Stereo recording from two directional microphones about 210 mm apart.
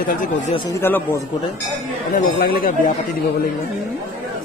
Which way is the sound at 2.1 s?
45° left (ahead or behind).